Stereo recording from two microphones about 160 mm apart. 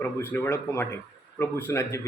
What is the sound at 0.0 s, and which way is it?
A man's voice, 15° left (ahead or behind).